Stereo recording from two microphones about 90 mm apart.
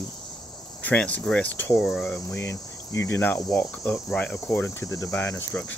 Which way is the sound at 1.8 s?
5° left (ahead or behind).